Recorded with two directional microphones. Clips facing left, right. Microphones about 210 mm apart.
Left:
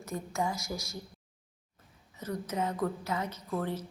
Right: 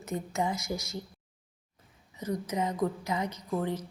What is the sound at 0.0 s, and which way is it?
Speech, 20° right (ahead or behind).